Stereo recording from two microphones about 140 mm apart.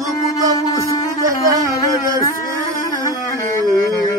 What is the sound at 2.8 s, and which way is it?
Music, 25° left (ahead or behind).